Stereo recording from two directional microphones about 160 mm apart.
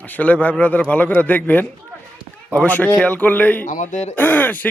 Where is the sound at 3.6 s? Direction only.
55° left (ahead or behind).